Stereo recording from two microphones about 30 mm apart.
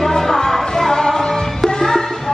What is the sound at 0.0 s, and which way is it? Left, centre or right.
Music, centre.